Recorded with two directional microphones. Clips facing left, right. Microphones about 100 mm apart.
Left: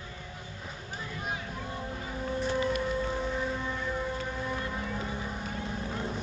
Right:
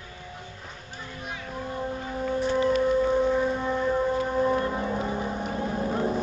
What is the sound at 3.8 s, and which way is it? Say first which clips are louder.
Music: right 9 dB; 40° right (ahead or behind).